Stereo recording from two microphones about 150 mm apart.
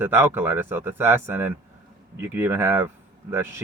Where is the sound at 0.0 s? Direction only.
15° right (ahead or behind).